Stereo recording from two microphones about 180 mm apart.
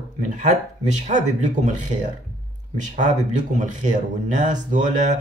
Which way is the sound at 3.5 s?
45° right (ahead or behind).